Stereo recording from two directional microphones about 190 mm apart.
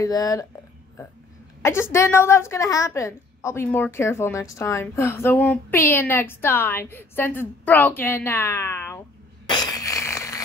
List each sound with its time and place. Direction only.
0.0 s a woman's voice: 20° left (ahead or behind)
1.6 s a woman's voice: 15° left (ahead or behind)
9.5 s a sound: 20° left (ahead or behind)